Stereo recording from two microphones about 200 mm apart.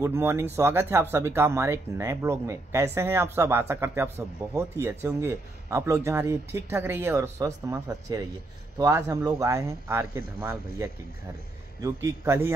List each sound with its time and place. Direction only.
0.0 s speech: 15° right (ahead or behind)